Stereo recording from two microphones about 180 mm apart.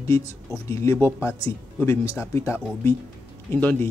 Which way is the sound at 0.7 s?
15° left (ahead or behind).